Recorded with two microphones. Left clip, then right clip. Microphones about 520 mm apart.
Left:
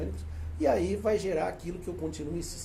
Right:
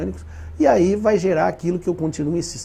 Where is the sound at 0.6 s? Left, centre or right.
Right.